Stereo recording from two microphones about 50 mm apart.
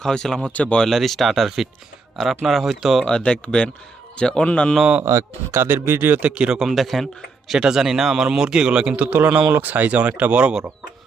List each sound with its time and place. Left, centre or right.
0.0 s speech: centre
0.9 s a man's voice: centre
3.1 s speech: centre
5.0 s speech: right
5.5 s speech: right
6.1 s speech: right
6.6 s a man's voice: centre
7.6 s speech: centre
9.0 s speech: right